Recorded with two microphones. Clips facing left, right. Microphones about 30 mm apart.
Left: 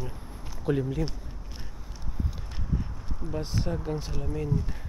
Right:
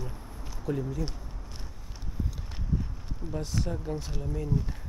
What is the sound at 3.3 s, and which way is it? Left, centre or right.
Speech, centre.